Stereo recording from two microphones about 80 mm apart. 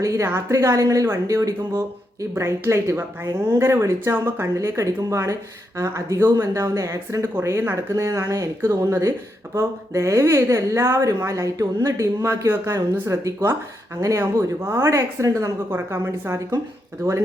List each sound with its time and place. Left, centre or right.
0.0 s a woman's voice: right
12.7 s a woman's voice: right
13.4 s speech: right
15.7 s speech: right